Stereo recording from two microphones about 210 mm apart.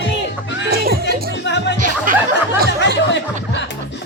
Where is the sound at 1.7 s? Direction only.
40° right (ahead or behind).